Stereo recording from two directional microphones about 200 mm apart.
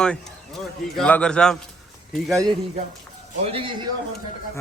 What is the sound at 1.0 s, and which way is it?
Speech, 5° left (ahead or behind).